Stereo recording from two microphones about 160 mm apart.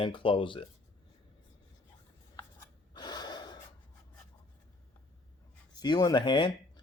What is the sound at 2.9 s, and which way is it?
Gasp, 25° left (ahead or behind).